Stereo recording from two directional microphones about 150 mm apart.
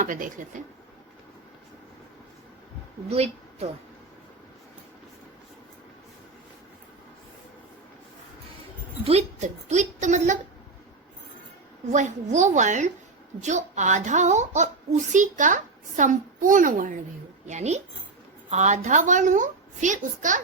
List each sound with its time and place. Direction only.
0.0 s a woman's voice: 65° right (ahead or behind)
3.1 s a woman's voice: 45° right (ahead or behind)
9.0 s a woman's voice: 45° right (ahead or behind)
11.9 s a woman's voice: 55° right (ahead or behind)
17.4 s a woman's voice: 50° right (ahead or behind)